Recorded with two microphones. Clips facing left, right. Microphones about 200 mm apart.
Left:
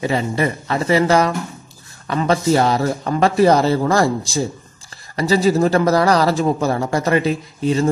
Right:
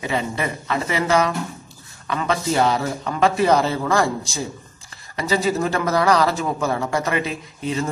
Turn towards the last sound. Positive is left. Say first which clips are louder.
# left 7 dB
turn(degrees=35)  # may be behind; listen again after turning